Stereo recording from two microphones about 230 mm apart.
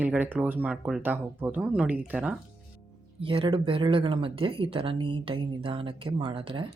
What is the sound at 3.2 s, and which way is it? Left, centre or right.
Speech, right.